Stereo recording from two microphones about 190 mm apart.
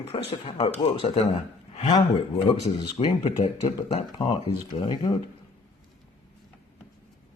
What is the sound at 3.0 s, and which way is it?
Speech, 35° left (ahead or behind).